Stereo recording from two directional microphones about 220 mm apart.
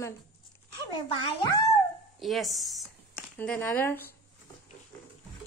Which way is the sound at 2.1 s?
Centre (ahead or behind).